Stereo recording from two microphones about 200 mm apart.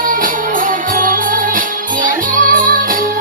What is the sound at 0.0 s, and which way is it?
Music, 40° right (ahead or behind).